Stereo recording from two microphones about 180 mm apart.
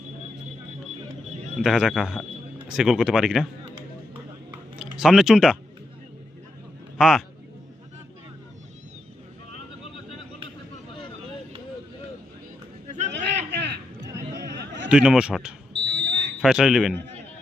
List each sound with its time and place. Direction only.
1.5 s speech: centre (ahead or behind)
4.8 s speech: 5° right (ahead or behind)
7.0 s speech: centre (ahead or behind)
13.1 s a sound: 75° right (ahead or behind)
14.8 s speech: 5° right (ahead or behind)
16.0 s fire alarm: 65° right (ahead or behind)
16.4 s speech: 5° right (ahead or behind)